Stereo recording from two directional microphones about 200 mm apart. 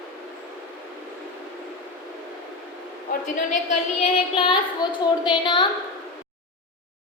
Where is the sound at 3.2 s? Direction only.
40° left (ahead or behind).